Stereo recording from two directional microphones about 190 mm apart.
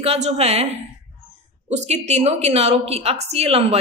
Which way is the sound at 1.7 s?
35° right (ahead or behind).